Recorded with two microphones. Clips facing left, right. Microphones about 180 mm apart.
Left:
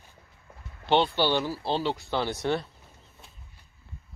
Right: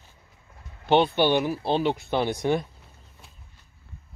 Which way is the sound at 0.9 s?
15° right (ahead or behind).